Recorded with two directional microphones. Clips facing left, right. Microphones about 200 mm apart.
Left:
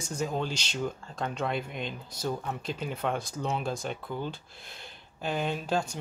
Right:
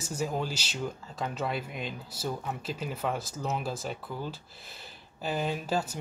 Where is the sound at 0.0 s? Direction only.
5° right (ahead or behind).